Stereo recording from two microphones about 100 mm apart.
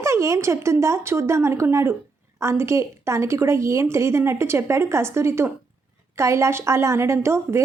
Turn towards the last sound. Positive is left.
turn(degrees=-25)  # may be behind; listen again after turning